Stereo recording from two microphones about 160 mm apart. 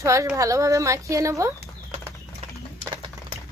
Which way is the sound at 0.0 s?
20° right (ahead or behind).